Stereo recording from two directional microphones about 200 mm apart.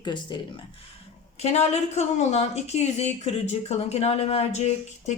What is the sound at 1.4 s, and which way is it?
A woman's voice, 35° left (ahead or behind).